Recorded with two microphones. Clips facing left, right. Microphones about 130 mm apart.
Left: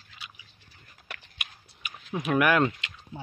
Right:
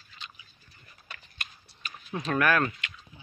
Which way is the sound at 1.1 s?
90° left.